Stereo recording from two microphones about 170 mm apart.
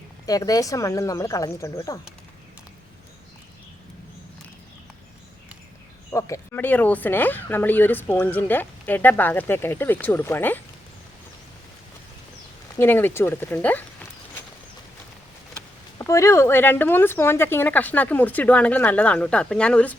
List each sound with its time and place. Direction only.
0.3 s speech: 20° left (ahead or behind)
6.1 s speech: 20° left (ahead or behind)
12.8 s speech: 10° left (ahead or behind)
16.0 s speech: 15° left (ahead or behind)